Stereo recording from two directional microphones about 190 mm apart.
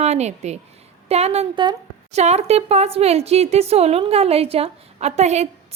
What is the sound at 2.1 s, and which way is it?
Speech, 35° right (ahead or behind).